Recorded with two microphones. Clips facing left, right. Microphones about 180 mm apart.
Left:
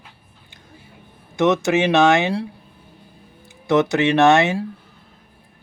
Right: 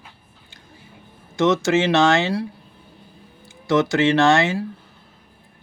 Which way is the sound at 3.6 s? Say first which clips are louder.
Left 1 dB; 20° left (ahead or behind).